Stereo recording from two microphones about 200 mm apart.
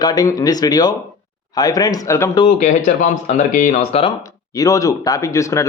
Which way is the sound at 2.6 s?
40° left (ahead or behind).